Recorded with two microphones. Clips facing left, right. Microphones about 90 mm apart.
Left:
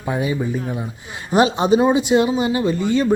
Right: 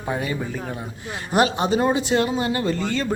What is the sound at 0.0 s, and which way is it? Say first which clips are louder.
A man's voice: left 4 dB; 15° left (ahead or behind).